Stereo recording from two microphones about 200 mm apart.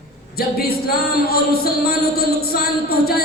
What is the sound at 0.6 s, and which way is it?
A capella, 50° left (ahead or behind).